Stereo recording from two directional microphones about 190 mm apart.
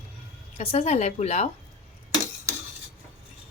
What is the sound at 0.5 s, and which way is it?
Speech, 30° left (ahead or behind).